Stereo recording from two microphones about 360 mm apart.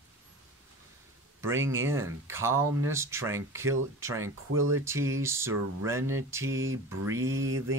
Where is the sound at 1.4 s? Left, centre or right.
Centre.